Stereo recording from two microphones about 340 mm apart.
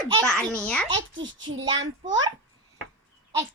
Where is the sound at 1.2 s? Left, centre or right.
Right.